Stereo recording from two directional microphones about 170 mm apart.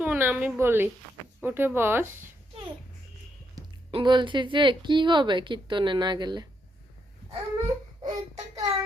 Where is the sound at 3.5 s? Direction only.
25° right (ahead or behind).